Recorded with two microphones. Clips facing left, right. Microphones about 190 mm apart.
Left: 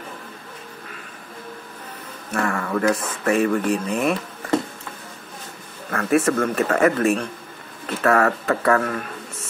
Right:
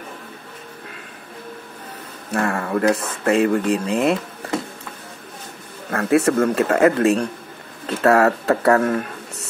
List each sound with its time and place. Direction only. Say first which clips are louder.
2.3 s speech: right 2 dB; 35° right (ahead or behind)
5.9 s speech: right 2 dB; 25° right (ahead or behind)